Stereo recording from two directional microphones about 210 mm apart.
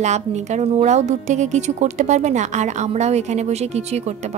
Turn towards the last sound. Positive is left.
turn(degrees=-30)  # may be behind; listen again after turning